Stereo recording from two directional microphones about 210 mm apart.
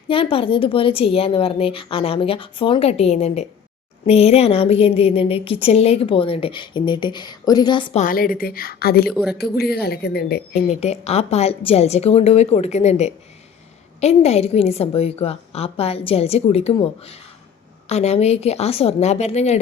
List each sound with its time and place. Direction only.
0.1 s a woman's voice: 25° left (ahead or behind)
8.0 s a woman's voice: 45° left (ahead or behind)
9.1 s speech: 5° right (ahead or behind)
9.4 s a woman's voice: 50° left (ahead or behind)
10.7 s a woman's voice: 30° left (ahead or behind)